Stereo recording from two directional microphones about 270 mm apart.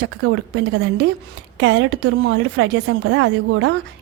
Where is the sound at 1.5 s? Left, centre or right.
Right.